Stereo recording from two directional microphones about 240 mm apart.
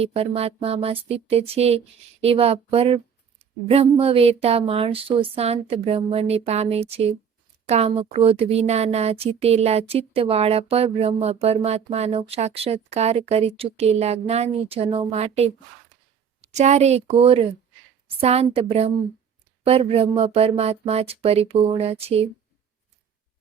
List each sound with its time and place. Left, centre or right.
0.0 s speech: right